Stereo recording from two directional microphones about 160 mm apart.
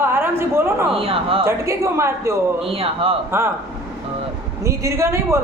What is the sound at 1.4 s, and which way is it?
Speech, 20° right (ahead or behind).